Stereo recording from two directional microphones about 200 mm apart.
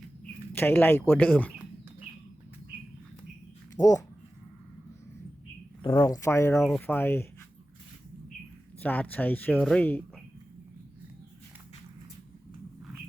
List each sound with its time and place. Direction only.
0.5 s speech: 10° left (ahead or behind)
3.8 s speech: 15° left (ahead or behind)
5.8 s speech: 15° left (ahead or behind)
6.6 s speech: 5° left (ahead or behind)
8.8 s speech: 10° left (ahead or behind)